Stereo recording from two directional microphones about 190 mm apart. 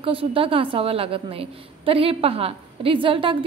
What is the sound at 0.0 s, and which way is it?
A woman's voice, 30° right (ahead or behind).